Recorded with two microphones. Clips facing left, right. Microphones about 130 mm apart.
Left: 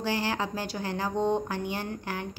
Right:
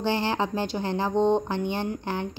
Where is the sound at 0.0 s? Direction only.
25° right (ahead or behind).